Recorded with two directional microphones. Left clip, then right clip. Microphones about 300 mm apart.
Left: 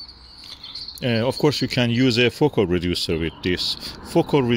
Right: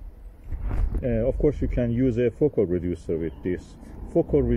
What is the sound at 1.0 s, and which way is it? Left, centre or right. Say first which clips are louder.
Speech: left 3 dB; left.